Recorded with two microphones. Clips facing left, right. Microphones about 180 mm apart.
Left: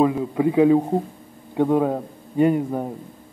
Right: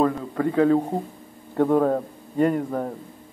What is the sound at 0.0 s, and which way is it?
A man's voice, 10° left (ahead or behind).